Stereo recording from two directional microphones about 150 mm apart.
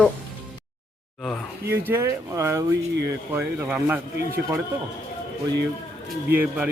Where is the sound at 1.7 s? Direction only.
15° right (ahead or behind).